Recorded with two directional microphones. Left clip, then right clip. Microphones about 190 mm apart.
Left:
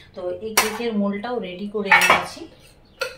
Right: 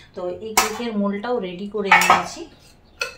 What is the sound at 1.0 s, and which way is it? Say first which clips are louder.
Speech: right 2 dB; 35° right (ahead or behind).